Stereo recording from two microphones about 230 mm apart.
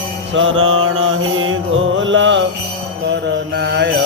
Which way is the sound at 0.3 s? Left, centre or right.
Right.